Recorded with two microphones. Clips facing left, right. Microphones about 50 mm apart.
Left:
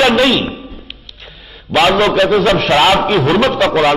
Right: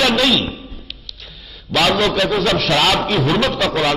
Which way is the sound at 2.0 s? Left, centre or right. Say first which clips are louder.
Left 6 dB; left.